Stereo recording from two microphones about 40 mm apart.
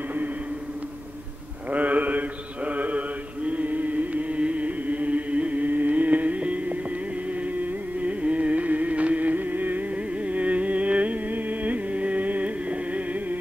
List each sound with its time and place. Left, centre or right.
1.7 s mantra: right
7.2 s music: right